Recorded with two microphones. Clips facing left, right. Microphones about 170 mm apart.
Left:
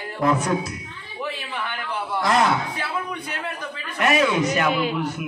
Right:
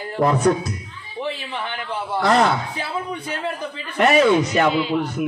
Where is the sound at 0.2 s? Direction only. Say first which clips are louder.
Right 4 dB; 35° right (ahead or behind).